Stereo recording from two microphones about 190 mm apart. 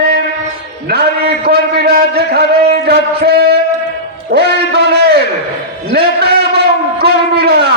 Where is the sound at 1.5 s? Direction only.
55° right (ahead or behind).